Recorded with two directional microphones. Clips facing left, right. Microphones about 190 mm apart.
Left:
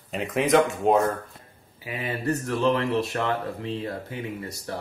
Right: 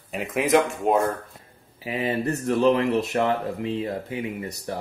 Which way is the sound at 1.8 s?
25° right (ahead or behind).